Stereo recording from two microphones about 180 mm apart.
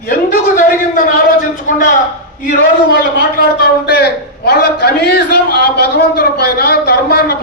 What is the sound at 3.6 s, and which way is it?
A man's voice, 60° left (ahead or behind).